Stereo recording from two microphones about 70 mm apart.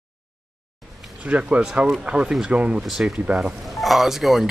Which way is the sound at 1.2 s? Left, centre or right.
Centre.